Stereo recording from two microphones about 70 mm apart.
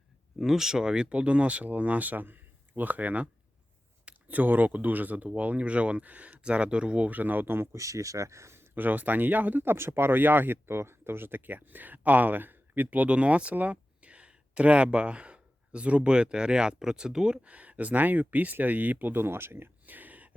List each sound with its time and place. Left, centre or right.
0.3 s speech: centre; by 7.8 s right
7.8 s speech: right